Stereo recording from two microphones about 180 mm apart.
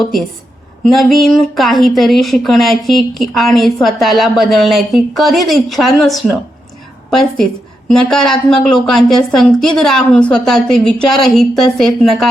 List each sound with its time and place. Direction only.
0.0 s speech: centre (ahead or behind)